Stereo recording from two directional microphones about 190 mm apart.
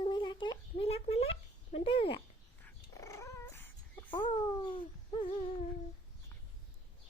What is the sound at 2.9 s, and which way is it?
Dog, 15° left (ahead or behind).